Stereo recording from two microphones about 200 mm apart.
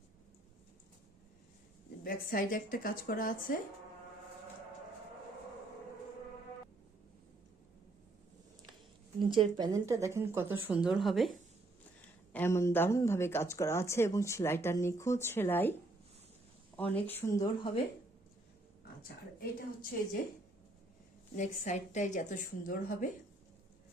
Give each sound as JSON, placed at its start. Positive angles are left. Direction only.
{"t": 2.0, "sound": "speech", "side_deg": 45}
{"t": 9.1, "sound": "a woman's voice", "side_deg": -25}
{"t": 12.3, "sound": "speech", "side_deg": 10}
{"t": 16.7, "sound": "speech", "side_deg": 10}
{"t": 19.0, "sound": "speech", "side_deg": 45}
{"t": 21.3, "sound": "a woman's voice", "side_deg": 40}